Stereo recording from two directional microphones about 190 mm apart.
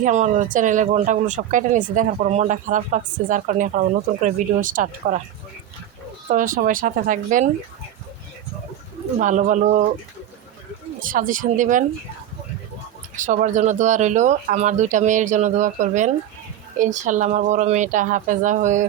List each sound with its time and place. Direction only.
0.0 s speech: 40° right (ahead or behind)
6.2 s speech: 45° right (ahead or behind)
9.1 s speech: 40° right (ahead or behind)
11.0 s speech: 45° right (ahead or behind)
13.1 s speech: 40° right (ahead or behind)